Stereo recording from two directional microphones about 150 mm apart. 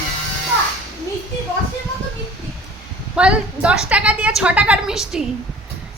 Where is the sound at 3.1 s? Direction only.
5° right (ahead or behind).